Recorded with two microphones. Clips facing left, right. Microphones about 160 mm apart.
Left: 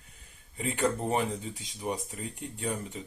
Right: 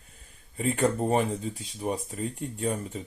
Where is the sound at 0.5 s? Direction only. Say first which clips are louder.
Right 4 dB; 40° right (ahead or behind).